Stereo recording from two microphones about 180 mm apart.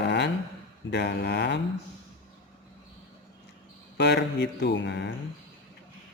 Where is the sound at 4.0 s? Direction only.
70° left (ahead or behind).